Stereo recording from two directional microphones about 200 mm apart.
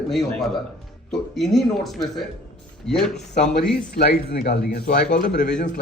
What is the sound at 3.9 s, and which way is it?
Speech, 50° left (ahead or behind).